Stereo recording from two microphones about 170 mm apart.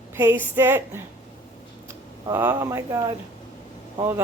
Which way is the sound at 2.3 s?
15° right (ahead or behind).